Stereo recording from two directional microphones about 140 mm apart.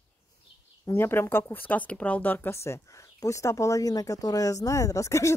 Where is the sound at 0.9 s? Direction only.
15° left (ahead or behind).